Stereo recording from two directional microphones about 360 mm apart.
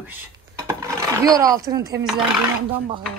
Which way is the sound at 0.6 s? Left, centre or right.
Centre.